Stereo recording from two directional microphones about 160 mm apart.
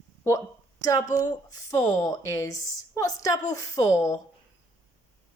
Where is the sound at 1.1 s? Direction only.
20° left (ahead or behind).